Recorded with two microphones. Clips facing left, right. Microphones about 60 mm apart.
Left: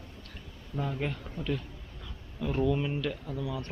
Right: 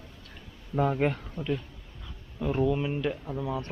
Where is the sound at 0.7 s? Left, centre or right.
Right.